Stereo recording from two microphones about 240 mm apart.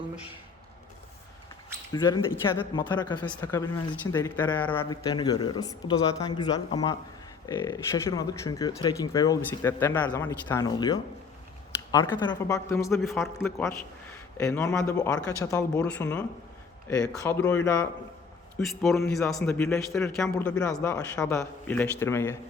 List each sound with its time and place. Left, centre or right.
1.9 s speech: centre
13.0 s a man's voice: centre
18.6 s a man's voice: centre